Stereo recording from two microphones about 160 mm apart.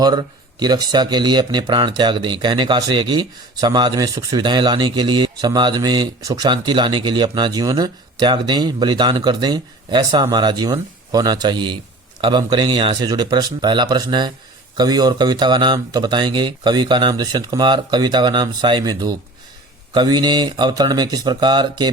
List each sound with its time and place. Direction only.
0.0 s a man's voice: 25° right (ahead or behind)